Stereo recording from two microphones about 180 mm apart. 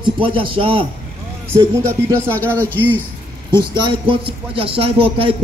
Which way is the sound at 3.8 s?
30° right (ahead or behind).